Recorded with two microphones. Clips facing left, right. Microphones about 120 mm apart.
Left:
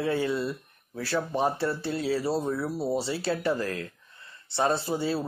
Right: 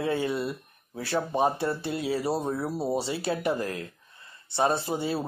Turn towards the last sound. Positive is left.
turn(degrees=-15)  # may be behind; listen again after turning